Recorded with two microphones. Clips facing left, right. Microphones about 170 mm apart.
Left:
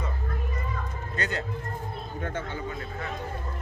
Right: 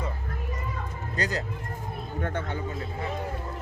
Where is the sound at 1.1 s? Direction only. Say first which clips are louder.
Right 2 dB; 35° right (ahead or behind).